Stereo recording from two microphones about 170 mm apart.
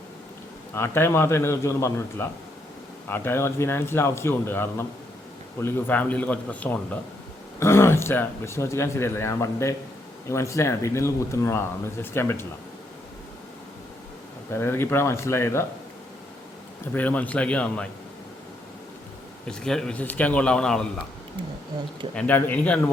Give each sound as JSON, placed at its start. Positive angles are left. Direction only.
{"t": 0.7, "sound": "speech", "side_deg": 15}
{"t": 14.5, "sound": "speech", "side_deg": 15}
{"t": 16.9, "sound": "speech", "side_deg": 10}
{"t": 19.5, "sound": "speech", "side_deg": 5}
{"t": 22.1, "sound": "speech", "side_deg": 10}